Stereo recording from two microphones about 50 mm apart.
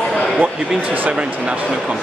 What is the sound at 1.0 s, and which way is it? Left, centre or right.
Speech, right.